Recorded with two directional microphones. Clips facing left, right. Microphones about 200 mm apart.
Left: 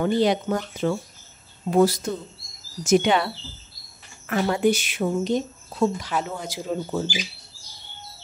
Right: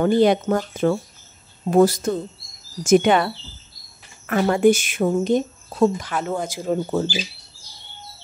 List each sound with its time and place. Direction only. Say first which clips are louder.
0.0 s speech: right 4 dB; 55° right (ahead or behind)
4.3 s speech: right 5 dB; 50° right (ahead or behind)